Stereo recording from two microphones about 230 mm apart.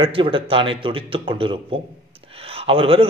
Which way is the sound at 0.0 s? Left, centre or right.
Right.